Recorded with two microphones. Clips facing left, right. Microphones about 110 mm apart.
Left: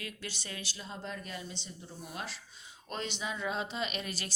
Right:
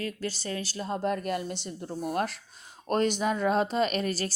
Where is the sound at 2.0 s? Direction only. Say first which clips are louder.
Right 13 dB; 50° right (ahead or behind).